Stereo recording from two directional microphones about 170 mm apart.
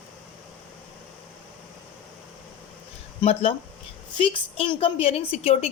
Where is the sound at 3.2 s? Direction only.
35° left (ahead or behind).